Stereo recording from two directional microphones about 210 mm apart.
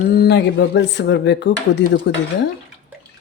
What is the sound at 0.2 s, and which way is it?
Speech, 55° left (ahead or behind).